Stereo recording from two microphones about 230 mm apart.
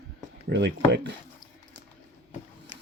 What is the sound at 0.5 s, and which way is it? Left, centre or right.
Speech, right.